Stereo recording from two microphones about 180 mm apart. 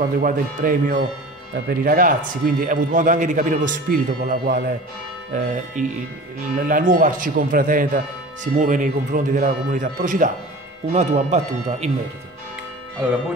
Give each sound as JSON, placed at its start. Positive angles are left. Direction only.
{"t": 0.0, "sound": "speech", "side_deg": -50}